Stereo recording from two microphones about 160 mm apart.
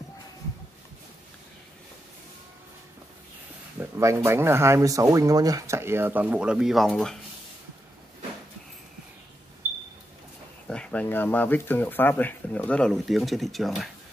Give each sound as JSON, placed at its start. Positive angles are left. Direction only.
{"t": 3.8, "sound": "speech", "side_deg": -15}
{"t": 10.7, "sound": "speech", "side_deg": 5}